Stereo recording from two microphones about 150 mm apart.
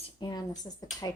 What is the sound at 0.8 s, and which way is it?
Speech, 25° left (ahead or behind).